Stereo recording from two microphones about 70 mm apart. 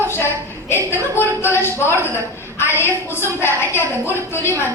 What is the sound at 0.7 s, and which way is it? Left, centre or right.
A woman's voice, left.